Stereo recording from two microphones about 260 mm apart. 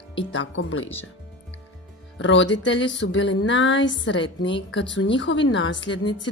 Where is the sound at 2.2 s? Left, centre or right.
Left.